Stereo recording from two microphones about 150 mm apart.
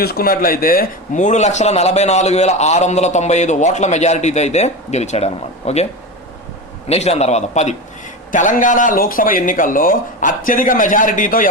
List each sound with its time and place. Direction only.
0.0 s a man's voice: 85° left; by 7.8 s 50° left (ahead or behind)
8.3 s a man's voice: 60° left (ahead or behind)